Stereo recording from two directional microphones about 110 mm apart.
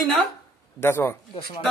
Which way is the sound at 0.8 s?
20° left (ahead or behind).